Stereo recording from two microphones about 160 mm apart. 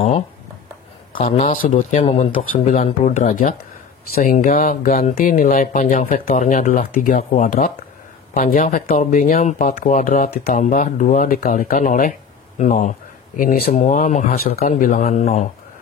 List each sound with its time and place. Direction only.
1.1 s speech: 45° left (ahead or behind)